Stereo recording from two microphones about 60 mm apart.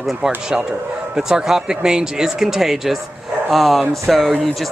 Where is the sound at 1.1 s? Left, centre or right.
Centre.